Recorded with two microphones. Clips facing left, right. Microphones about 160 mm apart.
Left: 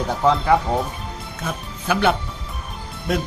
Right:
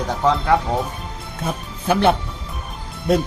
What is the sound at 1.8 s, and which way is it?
Speech, 25° right (ahead or behind).